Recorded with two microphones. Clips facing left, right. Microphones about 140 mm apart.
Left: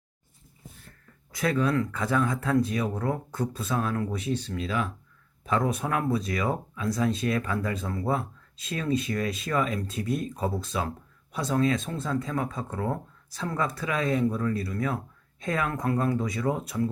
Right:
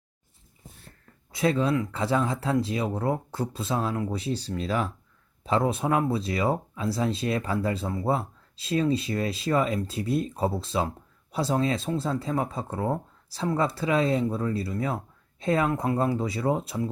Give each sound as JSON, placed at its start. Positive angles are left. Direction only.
{"t": 1.3, "sound": "speech", "side_deg": -25}